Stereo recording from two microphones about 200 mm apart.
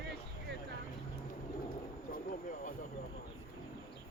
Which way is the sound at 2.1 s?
40° left (ahead or behind).